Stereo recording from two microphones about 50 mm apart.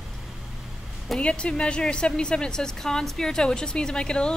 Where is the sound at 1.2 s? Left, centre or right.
Left.